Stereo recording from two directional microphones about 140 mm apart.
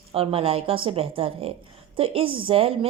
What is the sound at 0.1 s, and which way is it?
Speech, 45° right (ahead or behind).